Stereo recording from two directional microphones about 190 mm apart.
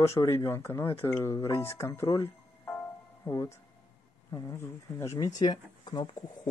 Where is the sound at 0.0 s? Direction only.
15° left (ahead or behind).